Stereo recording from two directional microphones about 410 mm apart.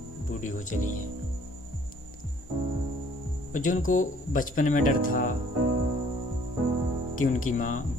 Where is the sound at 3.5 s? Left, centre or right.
Centre.